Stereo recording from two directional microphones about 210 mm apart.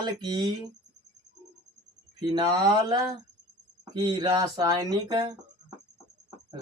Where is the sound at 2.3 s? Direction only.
20° right (ahead or behind).